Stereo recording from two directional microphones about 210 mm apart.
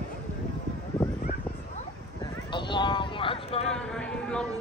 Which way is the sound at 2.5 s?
20° left (ahead or behind).